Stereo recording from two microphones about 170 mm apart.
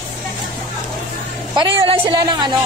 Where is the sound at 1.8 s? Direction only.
25° right (ahead or behind).